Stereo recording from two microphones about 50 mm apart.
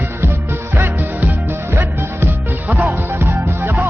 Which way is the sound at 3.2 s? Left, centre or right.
Right.